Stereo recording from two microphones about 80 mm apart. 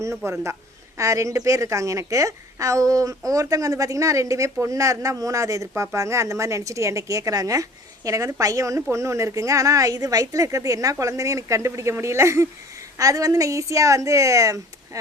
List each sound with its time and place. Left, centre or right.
0.2 s a woman's voice: right